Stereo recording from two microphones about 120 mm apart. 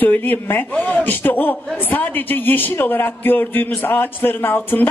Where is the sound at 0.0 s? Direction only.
15° left (ahead or behind).